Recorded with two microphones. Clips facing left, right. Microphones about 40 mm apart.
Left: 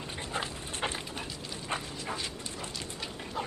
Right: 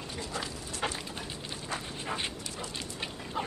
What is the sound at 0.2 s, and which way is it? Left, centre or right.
Dog, left.